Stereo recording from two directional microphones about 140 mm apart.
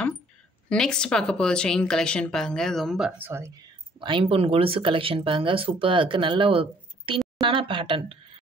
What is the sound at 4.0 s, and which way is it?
Speech, 35° right (ahead or behind).